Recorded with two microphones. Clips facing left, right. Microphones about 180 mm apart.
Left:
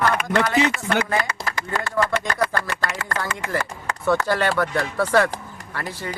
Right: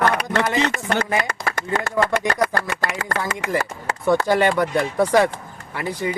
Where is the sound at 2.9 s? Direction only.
70° right (ahead or behind).